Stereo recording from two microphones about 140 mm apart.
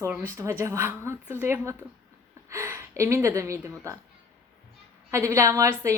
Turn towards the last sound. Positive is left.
turn(degrees=-20)  # may be behind; listen again after turning